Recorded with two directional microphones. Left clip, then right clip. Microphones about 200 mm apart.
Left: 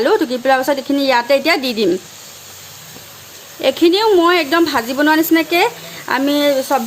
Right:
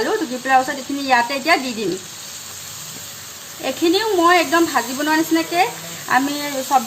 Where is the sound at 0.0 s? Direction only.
50° left (ahead or behind).